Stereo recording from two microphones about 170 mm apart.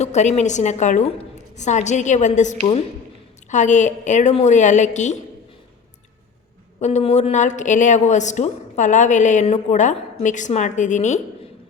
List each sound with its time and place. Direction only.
0.0 s a woman's voice: 40° left (ahead or behind)
6.7 s a woman's voice: 40° left (ahead or behind)